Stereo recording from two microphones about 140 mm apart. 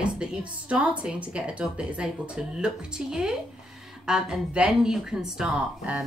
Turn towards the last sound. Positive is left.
turn(degrees=-5)  # may be behind; listen again after turning